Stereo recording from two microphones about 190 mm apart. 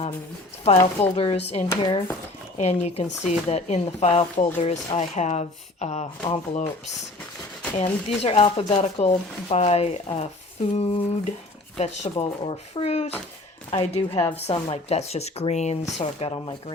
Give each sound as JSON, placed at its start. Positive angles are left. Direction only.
{"t": 0.8, "sound": "speech", "side_deg": 10}
{"t": 1.1, "sound": "speech", "side_deg": 30}
{"t": 2.6, "sound": "speech", "side_deg": 35}
{"t": 7.8, "sound": "speech", "side_deg": 35}